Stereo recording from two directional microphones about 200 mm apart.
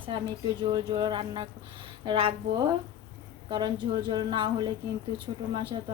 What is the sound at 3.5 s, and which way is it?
A woman's voice, 20° right (ahead or behind).